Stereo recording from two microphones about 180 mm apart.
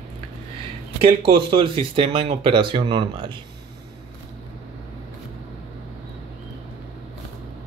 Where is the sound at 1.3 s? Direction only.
30° right (ahead or behind).